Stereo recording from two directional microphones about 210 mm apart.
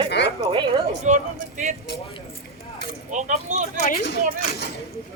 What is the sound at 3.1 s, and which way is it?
Speech, 35° right (ahead or behind).